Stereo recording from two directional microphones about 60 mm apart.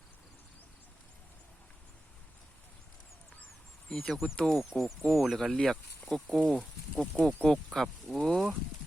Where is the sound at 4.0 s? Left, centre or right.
Centre.